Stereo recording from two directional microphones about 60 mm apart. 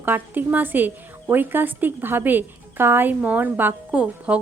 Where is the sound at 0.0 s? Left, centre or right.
Right.